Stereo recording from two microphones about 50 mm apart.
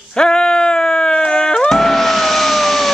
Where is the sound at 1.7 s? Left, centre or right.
Centre.